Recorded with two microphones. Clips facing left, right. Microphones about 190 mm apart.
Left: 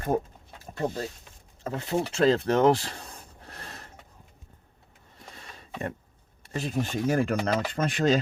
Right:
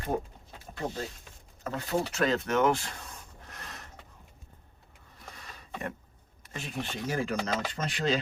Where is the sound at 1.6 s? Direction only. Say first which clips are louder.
Left 2 dB; 25° left (ahead or behind).